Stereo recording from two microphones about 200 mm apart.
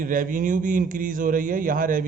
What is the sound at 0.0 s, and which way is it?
A man's voice, 45° right (ahead or behind).